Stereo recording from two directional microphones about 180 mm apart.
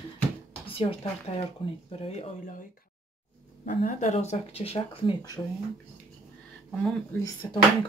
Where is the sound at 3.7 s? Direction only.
45° left (ahead or behind).